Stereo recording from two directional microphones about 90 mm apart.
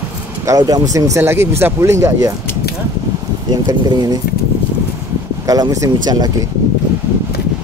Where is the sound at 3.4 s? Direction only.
45° right (ahead or behind).